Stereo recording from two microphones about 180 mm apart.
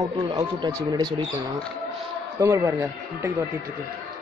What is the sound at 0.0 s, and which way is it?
Speech, 20° right (ahead or behind).